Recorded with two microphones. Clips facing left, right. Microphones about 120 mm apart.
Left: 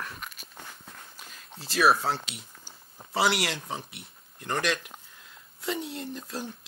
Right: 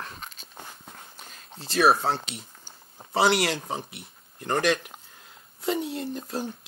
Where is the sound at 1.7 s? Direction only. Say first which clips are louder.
Right 2 dB; 30° right (ahead or behind).